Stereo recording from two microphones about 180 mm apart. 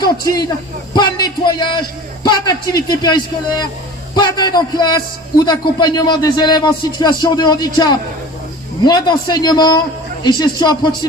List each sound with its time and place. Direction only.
0.0 s speech: 20° left (ahead or behind)